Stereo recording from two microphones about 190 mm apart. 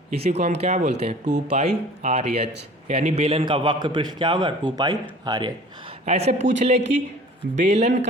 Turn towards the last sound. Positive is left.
turn(degrees=-35)  # may be behind; listen again after turning